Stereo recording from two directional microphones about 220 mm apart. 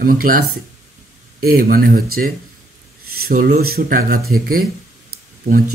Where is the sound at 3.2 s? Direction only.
40° right (ahead or behind).